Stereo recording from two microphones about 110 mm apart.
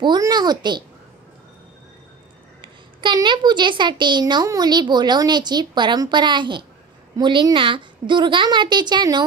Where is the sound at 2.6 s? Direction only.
45° right (ahead or behind).